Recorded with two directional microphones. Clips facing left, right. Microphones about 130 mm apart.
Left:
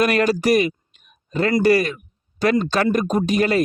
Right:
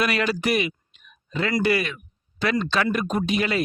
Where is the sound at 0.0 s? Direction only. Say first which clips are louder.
Left 6 dB; 45° left (ahead or behind).